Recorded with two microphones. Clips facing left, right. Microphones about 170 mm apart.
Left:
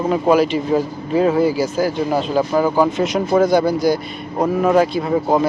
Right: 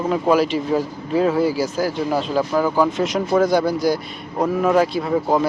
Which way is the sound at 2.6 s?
25° left (ahead or behind).